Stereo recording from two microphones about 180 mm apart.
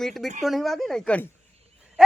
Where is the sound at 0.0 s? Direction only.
Centre (ahead or behind).